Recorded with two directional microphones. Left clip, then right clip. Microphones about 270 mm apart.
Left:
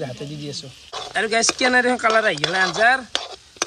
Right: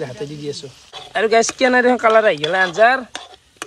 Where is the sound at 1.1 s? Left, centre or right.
Centre.